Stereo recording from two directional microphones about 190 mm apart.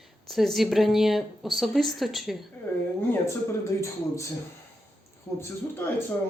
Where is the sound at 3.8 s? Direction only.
15° left (ahead or behind).